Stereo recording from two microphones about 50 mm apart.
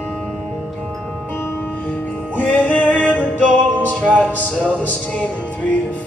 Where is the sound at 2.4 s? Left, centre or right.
Left.